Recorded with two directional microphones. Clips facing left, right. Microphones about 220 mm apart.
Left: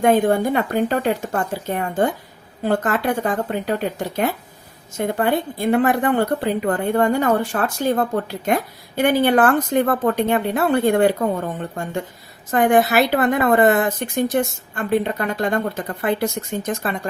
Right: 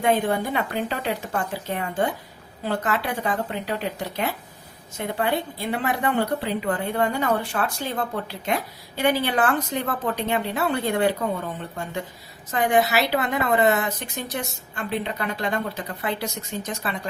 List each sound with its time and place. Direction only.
0.0 s a woman's voice: 45° left (ahead or behind)